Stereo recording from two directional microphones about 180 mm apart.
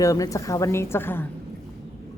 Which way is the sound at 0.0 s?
20° left (ahead or behind).